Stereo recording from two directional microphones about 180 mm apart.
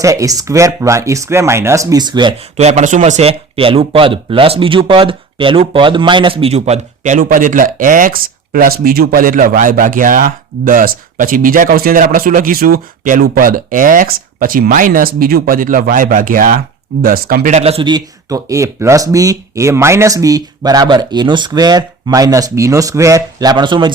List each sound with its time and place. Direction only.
0.0 s speech: 15° right (ahead or behind)
2.6 s a man's voice: 40° right (ahead or behind)